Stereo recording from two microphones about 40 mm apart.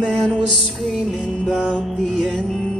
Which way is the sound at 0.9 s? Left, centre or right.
Centre.